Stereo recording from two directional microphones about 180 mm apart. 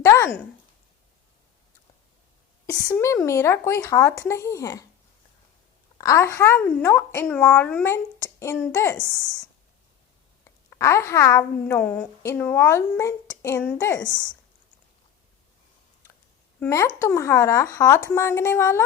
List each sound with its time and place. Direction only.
0.0 s a sound: 15° left (ahead or behind)
2.6 s a woman's voice: 20° left (ahead or behind)
6.0 s a woman's voice: 15° left (ahead or behind)
10.7 s a woman's voice: 15° left (ahead or behind)
16.6 s a woman's voice: 15° left (ahead or behind)